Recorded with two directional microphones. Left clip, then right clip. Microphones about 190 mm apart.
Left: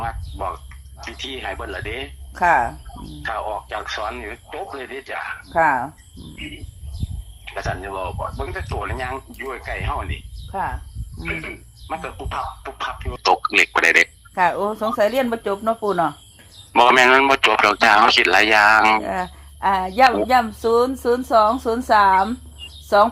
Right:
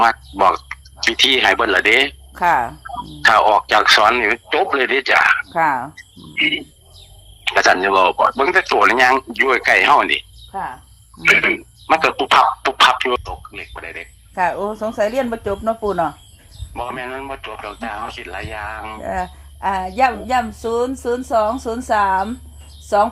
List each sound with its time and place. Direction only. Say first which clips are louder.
0.0 s speech: right 14 dB; 45° right (ahead or behind)
2.3 s speech: left 1 dB; 15° right (ahead or behind)
3.0 s speech: right 14 dB; 45° right (ahead or behind)
5.5 s speech: even; 15° right (ahead or behind)
6.0 s insect: right 17 dB; 45° right (ahead or behind)
7.4 s speech: right 14 dB; 45° right (ahead or behind)
10.5 s speech: left 1 dB; 10° right (ahead or behind)
11.2 s speech: right 15 dB; 50° right (ahead or behind)
13.2 s speech: left 15 dB; 45° left (ahead or behind)
14.3 s speech: even; 15° left (ahead or behind)
16.7 s speech: left 14 dB; 45° left (ahead or behind)
19.0 s speech: right 1 dB; 15° left (ahead or behind)